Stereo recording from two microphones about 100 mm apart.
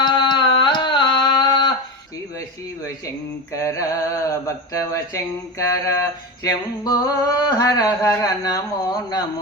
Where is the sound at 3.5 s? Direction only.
30° left (ahead or behind).